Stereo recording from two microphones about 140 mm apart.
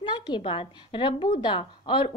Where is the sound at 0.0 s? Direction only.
35° left (ahead or behind).